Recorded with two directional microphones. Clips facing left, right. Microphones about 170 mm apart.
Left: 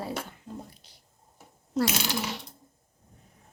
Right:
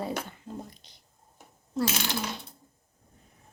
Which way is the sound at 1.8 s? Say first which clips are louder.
Left 2 dB; 90° left.